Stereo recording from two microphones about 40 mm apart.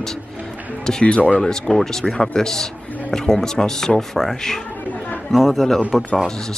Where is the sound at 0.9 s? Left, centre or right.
Centre.